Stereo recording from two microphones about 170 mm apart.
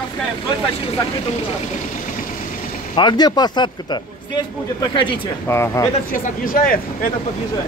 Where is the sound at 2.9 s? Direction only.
25° left (ahead or behind).